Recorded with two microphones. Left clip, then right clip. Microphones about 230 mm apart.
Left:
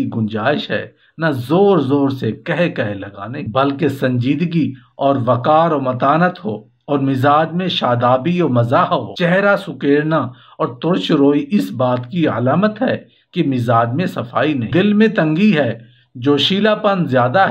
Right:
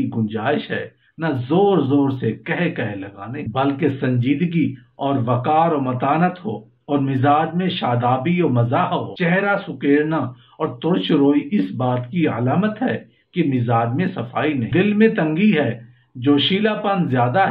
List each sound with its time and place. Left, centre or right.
0.3 s speech: left